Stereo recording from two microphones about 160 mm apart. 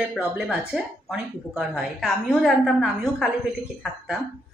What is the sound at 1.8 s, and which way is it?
A woman's voice, centre (ahead or behind).